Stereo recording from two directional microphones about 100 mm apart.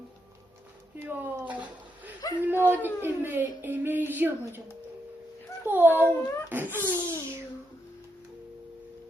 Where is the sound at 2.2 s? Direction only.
35° left (ahead or behind).